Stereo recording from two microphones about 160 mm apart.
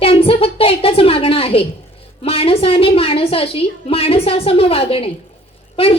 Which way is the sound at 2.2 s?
35° left (ahead or behind).